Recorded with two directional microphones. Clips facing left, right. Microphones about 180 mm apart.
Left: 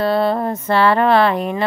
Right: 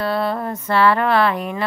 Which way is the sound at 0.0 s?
25° left (ahead or behind).